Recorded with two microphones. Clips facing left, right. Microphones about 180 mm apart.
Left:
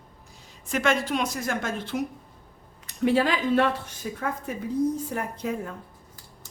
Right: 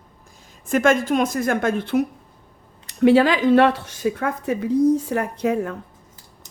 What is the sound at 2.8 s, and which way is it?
Speech, 80° right.